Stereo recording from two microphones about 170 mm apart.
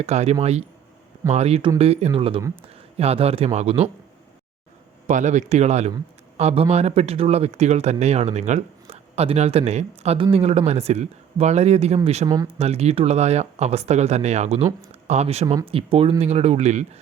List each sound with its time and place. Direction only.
0.0 s speech: 40° right (ahead or behind)
5.0 s speech: 45° right (ahead or behind)
15.4 s speech: 30° right (ahead or behind)